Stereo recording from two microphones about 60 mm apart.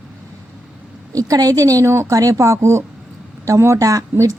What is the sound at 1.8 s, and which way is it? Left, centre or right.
Speech, right.